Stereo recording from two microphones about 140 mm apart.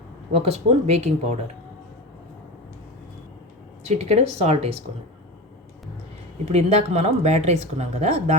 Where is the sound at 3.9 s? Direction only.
50° right (ahead or behind).